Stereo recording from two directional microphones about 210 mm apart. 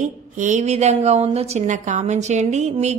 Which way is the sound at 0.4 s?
35° right (ahead or behind).